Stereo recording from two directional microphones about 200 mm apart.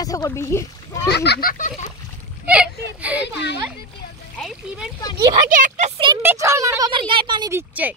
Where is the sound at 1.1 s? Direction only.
55° left (ahead or behind).